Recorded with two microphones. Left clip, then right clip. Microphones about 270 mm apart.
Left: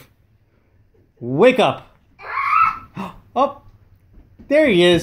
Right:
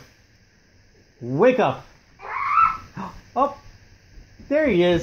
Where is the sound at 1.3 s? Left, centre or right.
Left.